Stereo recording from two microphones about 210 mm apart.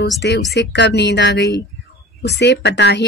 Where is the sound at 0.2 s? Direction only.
50° left (ahead or behind).